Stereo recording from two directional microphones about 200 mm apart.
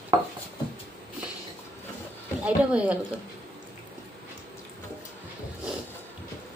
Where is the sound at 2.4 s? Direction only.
5° right (ahead or behind).